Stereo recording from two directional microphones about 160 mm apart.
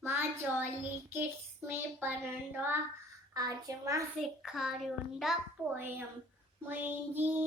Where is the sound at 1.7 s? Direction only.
10° right (ahead or behind).